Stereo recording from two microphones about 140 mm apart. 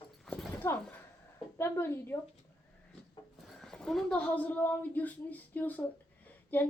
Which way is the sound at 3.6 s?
5° left (ahead or behind).